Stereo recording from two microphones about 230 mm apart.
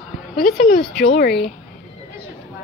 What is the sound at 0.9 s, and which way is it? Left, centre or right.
Speech, left.